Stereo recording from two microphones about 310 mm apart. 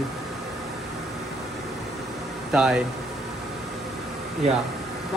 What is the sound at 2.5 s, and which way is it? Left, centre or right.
Speech, centre.